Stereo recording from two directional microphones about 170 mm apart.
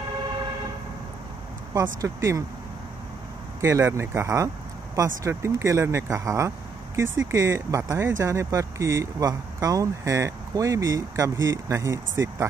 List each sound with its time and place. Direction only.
2.0 s speech: 20° right (ahead or behind)
3.6 s speech: 15° right (ahead or behind)